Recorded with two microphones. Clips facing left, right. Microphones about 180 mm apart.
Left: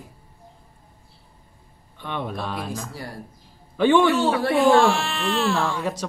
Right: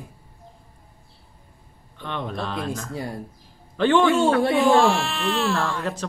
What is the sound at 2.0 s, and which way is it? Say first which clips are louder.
Speech: even; 10° left (ahead or behind).